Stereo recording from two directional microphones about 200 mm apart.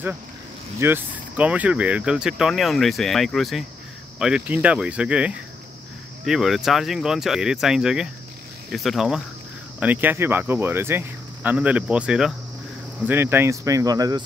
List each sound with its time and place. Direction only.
0.7 s speech: 10° right (ahead or behind)